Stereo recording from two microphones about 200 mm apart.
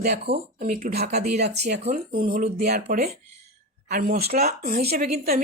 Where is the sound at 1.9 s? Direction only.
40° right (ahead or behind).